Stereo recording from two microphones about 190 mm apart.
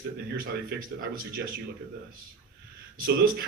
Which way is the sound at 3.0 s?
50° right (ahead or behind).